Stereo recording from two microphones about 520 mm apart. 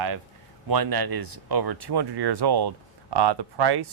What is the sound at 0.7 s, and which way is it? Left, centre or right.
Speech, right.